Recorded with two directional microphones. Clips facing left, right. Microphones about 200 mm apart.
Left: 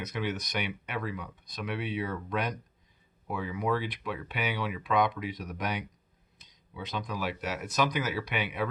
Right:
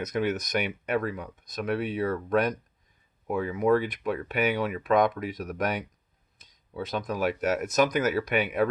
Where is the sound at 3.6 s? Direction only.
50° right (ahead or behind).